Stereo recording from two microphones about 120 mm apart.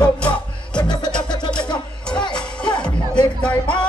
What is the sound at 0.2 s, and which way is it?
Music, 10° left (ahead or behind).